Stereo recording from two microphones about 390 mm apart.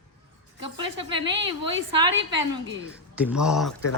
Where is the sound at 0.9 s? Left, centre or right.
Right.